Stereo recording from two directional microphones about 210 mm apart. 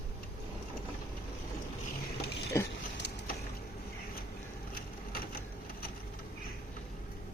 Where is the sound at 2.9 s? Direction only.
55° left (ahead or behind).